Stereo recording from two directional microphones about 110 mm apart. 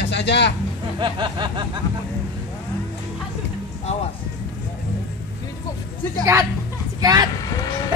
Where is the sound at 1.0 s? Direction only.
45° right (ahead or behind).